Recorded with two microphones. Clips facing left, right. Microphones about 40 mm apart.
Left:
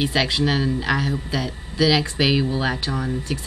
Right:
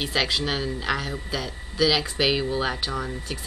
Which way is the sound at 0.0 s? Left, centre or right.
Centre.